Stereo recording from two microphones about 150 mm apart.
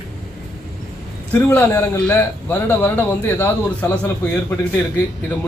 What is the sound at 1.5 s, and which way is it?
A man's voice, 15° left (ahead or behind).